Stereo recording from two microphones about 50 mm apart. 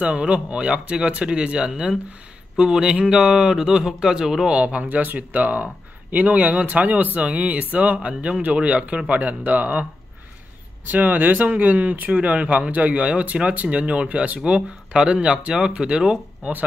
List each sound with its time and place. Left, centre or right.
0.0 s speech: right
4.5 s speech: right
10.9 s speech: right; by 16.2 s centre